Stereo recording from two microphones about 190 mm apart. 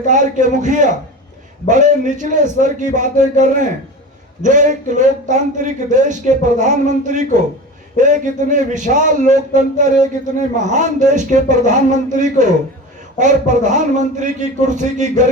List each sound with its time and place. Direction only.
0.0 s speech: 40° right (ahead or behind)